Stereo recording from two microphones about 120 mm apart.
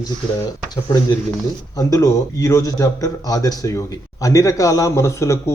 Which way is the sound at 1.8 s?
30° left (ahead or behind).